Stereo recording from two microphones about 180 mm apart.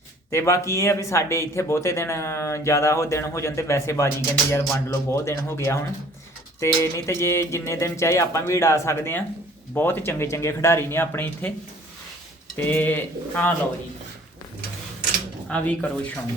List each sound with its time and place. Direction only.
0.3 s speech: 15° left (ahead or behind)
12.5 s speech: 10° left (ahead or behind)
15.4 s speech: 5° left (ahead or behind)